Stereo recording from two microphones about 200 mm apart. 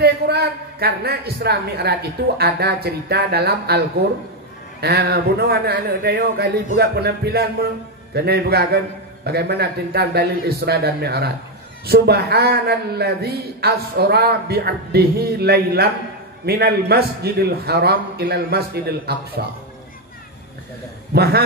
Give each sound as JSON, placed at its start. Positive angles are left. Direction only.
{"t": 0.0, "sound": "speech", "side_deg": -50}
{"t": 21.1, "sound": "speech", "side_deg": -50}